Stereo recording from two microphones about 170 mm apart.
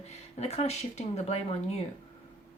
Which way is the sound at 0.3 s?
40° left (ahead or behind).